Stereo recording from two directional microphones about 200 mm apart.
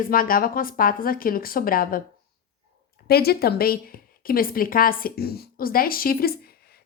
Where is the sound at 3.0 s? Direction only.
50° left (ahead or behind).